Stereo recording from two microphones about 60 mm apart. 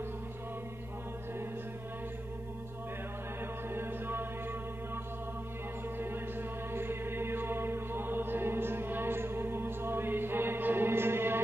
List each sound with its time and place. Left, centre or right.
3.7 s music: right
6.7 s music: right